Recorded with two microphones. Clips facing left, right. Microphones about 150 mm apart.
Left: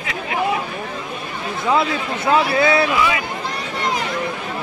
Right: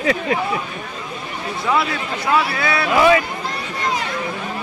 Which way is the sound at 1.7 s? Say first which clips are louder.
Left 2 dB; 25° left (ahead or behind).